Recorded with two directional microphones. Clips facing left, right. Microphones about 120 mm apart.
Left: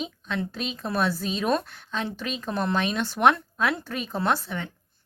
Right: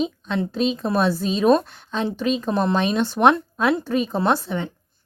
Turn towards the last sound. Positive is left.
turn(degrees=-25)  # may be behind; listen again after turning